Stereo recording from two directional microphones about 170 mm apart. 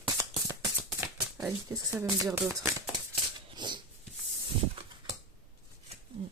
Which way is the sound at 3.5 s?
25° right (ahead or behind).